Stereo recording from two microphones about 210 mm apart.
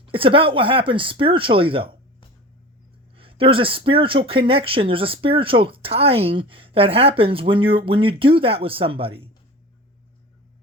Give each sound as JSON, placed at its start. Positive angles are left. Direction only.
{"t": 0.1, "sound": "speech", "side_deg": -25}
{"t": 3.2, "sound": "speech", "side_deg": -25}